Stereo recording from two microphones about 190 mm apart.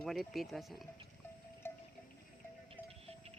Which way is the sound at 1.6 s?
10° left (ahead or behind).